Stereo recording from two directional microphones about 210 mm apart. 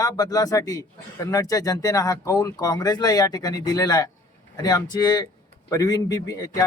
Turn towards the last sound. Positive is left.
turn(degrees=15)  # may be behind; listen again after turning